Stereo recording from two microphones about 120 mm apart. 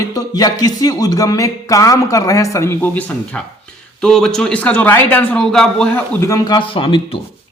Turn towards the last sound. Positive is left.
turn(degrees=45)  # may be behind; listen again after turning